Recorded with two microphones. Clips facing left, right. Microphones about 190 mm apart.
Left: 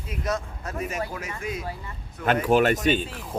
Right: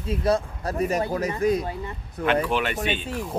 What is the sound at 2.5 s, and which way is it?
Speech, 45° left (ahead or behind).